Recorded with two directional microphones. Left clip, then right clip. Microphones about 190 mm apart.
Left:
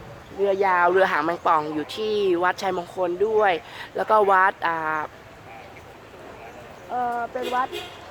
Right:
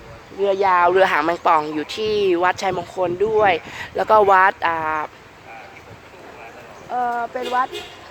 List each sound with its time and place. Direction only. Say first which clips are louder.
0.4 s speech: right 4 dB; 20° right (ahead or behind)
6.9 s speech: right 4 dB; 40° right (ahead or behind)